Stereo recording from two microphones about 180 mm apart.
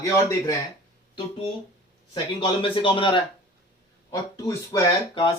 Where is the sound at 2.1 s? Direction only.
25° left (ahead or behind).